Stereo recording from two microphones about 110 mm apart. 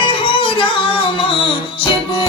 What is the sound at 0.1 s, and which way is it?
Music, 50° left (ahead or behind).